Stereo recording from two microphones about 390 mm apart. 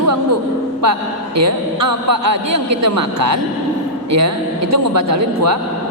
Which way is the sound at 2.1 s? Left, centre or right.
Right.